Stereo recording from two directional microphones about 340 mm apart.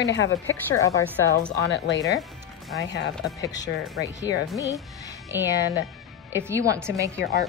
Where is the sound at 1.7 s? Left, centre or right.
Left.